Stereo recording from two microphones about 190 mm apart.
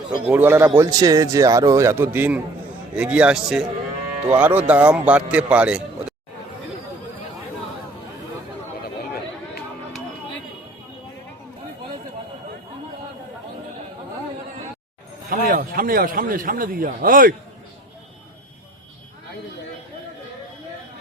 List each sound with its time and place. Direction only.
0.3 s a man's voice: 10° right (ahead or behind)
15.3 s speech: 50° right (ahead or behind)